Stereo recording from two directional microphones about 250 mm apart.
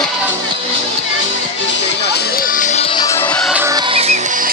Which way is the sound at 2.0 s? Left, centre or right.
Left.